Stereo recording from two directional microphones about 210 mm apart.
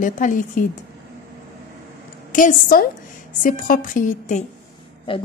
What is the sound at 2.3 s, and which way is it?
Speech, 40° left (ahead or behind).